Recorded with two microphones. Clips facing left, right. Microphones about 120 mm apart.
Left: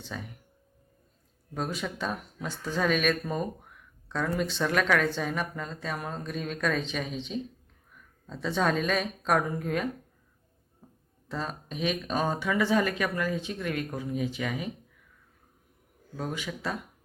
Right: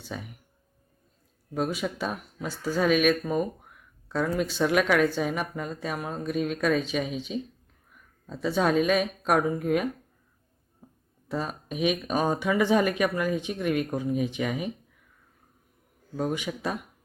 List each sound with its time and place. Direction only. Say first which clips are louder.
0.0 s speech: right 2 dB; 10° right (ahead or behind)
1.5 s speech: right 4 dB; 5° right (ahead or behind)
11.3 s speech: right 3 dB; 10° right (ahead or behind)
16.1 s speech: right 5 dB; 20° right (ahead or behind)